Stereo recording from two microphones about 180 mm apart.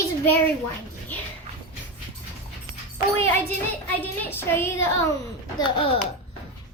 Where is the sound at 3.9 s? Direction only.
10° left (ahead or behind).